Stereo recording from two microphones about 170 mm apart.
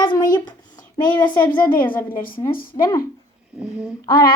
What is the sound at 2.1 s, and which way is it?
Speech, 55° left (ahead or behind).